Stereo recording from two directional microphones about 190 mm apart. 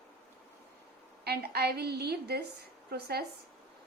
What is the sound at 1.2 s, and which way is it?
A woman's voice, 55° right (ahead or behind).